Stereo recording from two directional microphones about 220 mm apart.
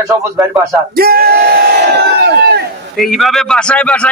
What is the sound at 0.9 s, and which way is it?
Crowd, 45° right (ahead or behind).